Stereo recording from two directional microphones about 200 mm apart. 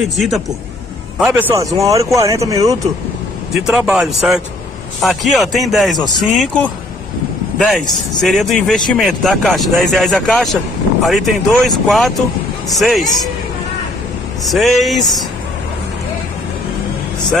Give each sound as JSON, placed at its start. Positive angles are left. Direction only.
{"t": 1.2, "sound": "speech", "side_deg": -10}
{"t": 3.6, "sound": "speech", "side_deg": -5}
{"t": 14.4, "sound": "speech", "side_deg": 0}